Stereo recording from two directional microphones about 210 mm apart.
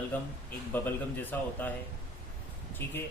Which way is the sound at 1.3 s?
10° left (ahead or behind).